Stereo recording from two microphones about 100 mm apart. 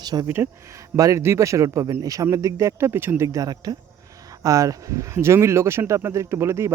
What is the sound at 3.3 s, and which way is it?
A man's voice, 40° right (ahead or behind).